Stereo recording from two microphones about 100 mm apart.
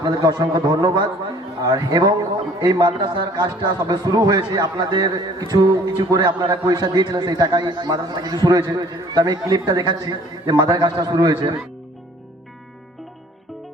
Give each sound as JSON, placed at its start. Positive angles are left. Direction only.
{"t": 0.0, "sound": "a man's voice", "side_deg": -45}